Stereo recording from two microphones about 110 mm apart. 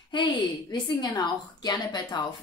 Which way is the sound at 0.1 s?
45° left (ahead or behind).